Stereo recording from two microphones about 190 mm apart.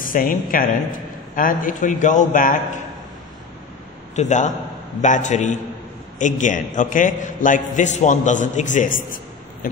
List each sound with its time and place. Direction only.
0.0 s a man's voice: 45° left (ahead or behind)
4.1 s a man's voice: 40° left (ahead or behind)